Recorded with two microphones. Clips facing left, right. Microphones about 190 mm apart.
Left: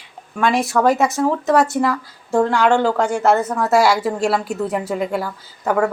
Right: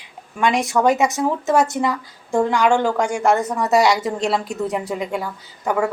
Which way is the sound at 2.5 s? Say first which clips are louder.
Even; 10° right (ahead or behind).